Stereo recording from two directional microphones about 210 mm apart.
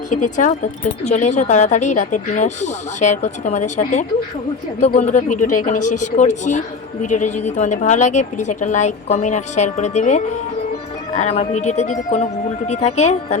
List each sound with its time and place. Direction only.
0.1 s speech: 35° left (ahead or behind)